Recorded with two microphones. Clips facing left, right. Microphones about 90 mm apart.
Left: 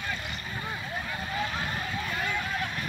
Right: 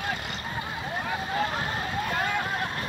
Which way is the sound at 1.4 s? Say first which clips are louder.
Right 1 dB; 40° right (ahead or behind).